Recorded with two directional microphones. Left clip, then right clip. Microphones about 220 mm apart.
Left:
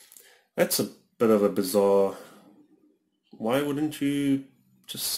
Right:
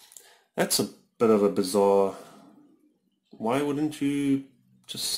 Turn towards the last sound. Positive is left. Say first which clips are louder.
# right 1 dB
turn(degrees=0)  # may be behind; listen again after turning